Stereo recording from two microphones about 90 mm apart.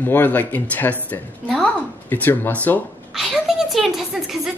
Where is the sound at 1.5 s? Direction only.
10° left (ahead or behind).